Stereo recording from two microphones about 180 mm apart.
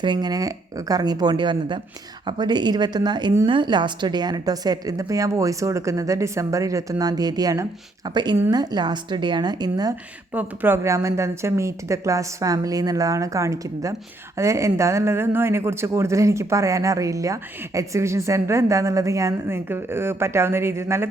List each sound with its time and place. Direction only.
0.0 s a woman's voice: 25° right (ahead or behind)
10.3 s a woman's voice: 10° right (ahead or behind)